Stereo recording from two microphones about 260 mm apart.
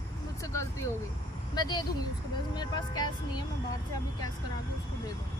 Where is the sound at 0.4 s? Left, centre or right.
Centre.